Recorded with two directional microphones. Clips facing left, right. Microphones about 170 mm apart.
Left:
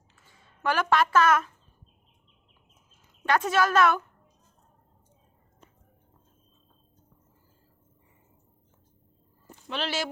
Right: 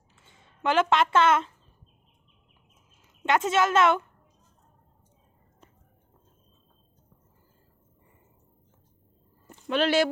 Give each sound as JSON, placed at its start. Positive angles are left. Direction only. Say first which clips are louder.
{"t": 0.2, "sound": "speech", "louder": "right 2 dB", "side_deg": -25}
{"t": 3.2, "sound": "a woman's voice", "louder": "right 1 dB", "side_deg": -20}
{"t": 9.6, "sound": "speech", "louder": "right 9 dB", "side_deg": -55}